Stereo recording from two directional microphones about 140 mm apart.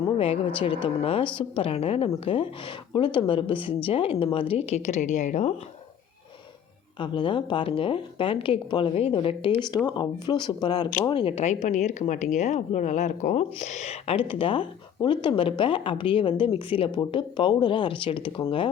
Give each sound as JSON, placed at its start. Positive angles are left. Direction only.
{"t": 0.2, "sound": "speech", "side_deg": 40}
{"t": 7.0, "sound": "speech", "side_deg": 35}